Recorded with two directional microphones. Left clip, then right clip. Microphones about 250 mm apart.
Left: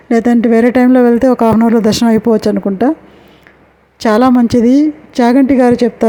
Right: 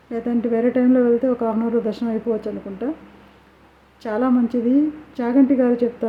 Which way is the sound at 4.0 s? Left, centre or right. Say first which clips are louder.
Left 11 dB; left.